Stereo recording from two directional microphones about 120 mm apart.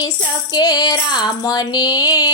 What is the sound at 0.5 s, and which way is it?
Music, 30° left (ahead or behind).